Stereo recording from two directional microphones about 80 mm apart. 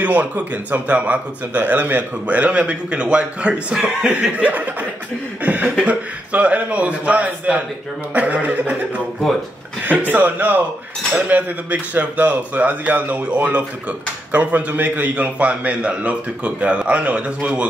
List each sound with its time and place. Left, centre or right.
0.0 s speech: centre